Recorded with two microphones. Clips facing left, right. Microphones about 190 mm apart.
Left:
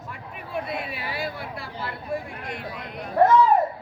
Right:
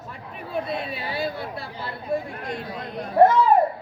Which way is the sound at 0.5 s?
25° right (ahead or behind).